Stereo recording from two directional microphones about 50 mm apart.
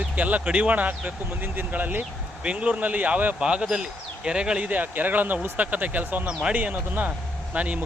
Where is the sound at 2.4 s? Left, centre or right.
Right.